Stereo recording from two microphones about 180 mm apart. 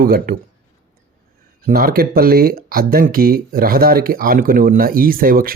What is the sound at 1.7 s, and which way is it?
Speech, 55° right (ahead or behind).